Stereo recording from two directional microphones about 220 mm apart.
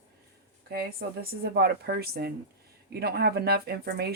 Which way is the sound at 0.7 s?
45° right (ahead or behind).